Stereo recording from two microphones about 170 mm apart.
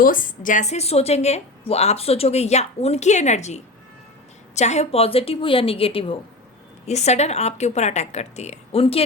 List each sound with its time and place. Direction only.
0.0 s a woman's voice: 55° left (ahead or behind); by 9.0 s 35° left (ahead or behind)